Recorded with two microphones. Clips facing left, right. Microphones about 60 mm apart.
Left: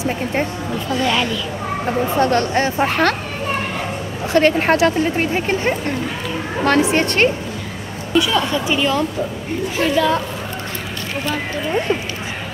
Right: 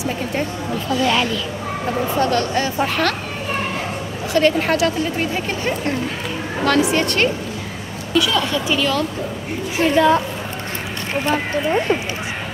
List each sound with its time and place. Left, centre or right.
0.0 s a sound: left
1.0 s a woman's voice: centre
1.9 s speech: left
4.3 s speech: left
8.1 s a woman's voice: left
9.8 s a woman's voice: right
11.9 s speech: right